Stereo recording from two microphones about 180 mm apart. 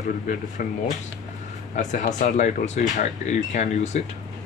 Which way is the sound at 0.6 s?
50° left (ahead or behind).